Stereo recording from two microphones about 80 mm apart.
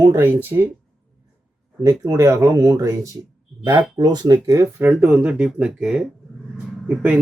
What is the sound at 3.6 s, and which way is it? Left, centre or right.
Speech, right.